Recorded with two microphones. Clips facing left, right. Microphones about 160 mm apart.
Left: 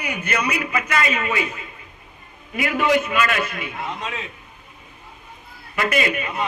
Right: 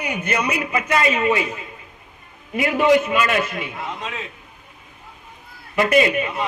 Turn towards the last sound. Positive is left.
turn(degrees=-30)  # may be behind; listen again after turning